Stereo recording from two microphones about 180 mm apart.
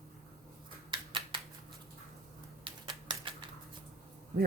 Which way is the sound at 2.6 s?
25° right (ahead or behind).